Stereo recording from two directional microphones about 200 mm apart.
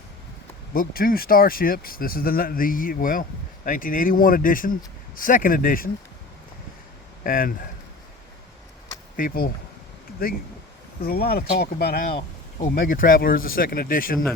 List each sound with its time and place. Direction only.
0.7 s speech: 45° left (ahead or behind)
7.3 s speech: 45° left (ahead or behind)
9.1 s speech: 45° left (ahead or behind)